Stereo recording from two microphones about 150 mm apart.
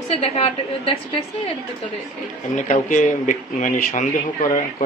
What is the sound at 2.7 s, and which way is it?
A man's voice, 55° left (ahead or behind).